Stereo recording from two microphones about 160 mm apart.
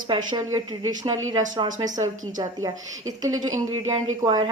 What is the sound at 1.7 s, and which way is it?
Speech, 50° right (ahead or behind).